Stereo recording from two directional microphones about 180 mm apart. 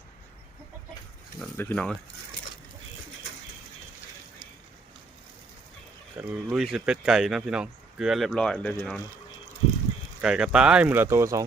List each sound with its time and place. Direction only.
1.4 s speech: 5° left (ahead or behind)
6.2 s speech: 5° right (ahead or behind)
10.2 s speech: 5° right (ahead or behind)